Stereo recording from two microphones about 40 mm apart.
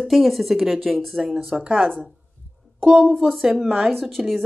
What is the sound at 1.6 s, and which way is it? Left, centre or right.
Speech, right.